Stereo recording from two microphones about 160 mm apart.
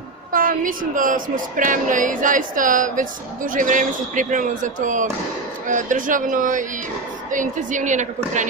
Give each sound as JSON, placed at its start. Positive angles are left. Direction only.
{"t": 0.3, "sound": "a woman's voice", "side_deg": -60}